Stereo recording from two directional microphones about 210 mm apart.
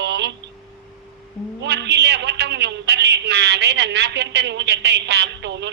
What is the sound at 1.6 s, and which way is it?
A man's voice, 55° right (ahead or behind).